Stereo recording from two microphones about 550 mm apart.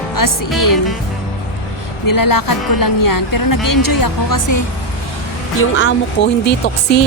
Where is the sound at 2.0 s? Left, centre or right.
Left.